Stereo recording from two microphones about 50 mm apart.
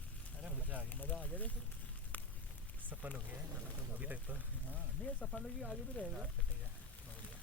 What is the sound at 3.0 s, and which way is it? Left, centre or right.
Speech, right.